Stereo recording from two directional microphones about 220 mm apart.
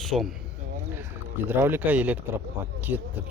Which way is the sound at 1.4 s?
10° right (ahead or behind).